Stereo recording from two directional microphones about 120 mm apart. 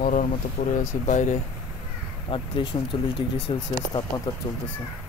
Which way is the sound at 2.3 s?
45° left (ahead or behind).